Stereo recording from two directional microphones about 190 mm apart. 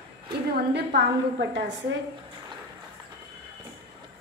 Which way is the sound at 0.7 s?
70° right (ahead or behind).